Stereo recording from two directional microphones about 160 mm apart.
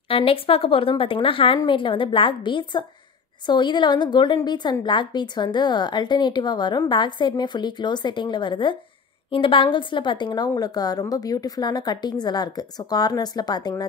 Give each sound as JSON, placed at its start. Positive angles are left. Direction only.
{"t": 0.1, "sound": "a woman's voice", "side_deg": 35}